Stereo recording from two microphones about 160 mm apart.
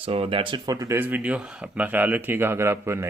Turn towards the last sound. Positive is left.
turn(degrees=-15)  # may be behind; listen again after turning